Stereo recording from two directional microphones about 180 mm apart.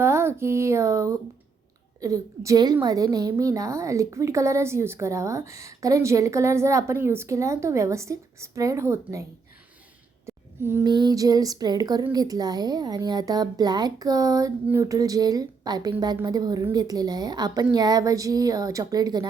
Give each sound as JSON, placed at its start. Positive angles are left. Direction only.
{"t": 0.0, "sound": "a woman's voice", "side_deg": -15}
{"t": 10.2, "sound": "a sound", "side_deg": -15}
{"t": 10.8, "sound": "speech", "side_deg": -25}